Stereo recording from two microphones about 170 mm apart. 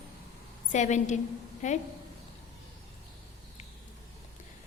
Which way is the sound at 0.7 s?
45° left (ahead or behind).